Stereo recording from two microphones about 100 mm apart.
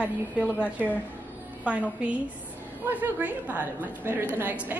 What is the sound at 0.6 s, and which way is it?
Speech, 15° left (ahead or behind).